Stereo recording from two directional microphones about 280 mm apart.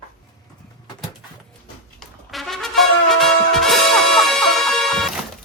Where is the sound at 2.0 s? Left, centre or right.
Centre.